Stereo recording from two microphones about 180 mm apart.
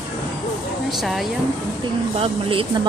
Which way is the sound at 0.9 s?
Centre (ahead or behind).